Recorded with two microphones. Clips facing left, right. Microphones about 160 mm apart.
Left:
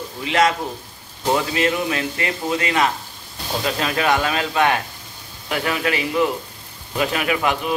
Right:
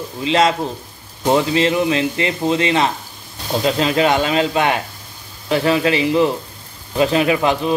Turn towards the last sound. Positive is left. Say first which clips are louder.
# right 5 dB
turn(degrees=-30)  # may be behind; listen again after turning